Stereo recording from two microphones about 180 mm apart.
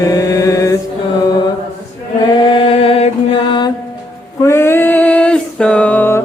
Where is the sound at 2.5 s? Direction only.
30° left (ahead or behind).